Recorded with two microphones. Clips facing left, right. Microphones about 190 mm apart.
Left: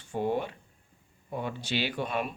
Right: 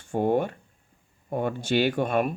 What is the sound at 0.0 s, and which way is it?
Speech, 50° right (ahead or behind).